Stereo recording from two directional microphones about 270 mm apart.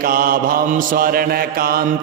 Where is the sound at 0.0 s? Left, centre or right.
Right.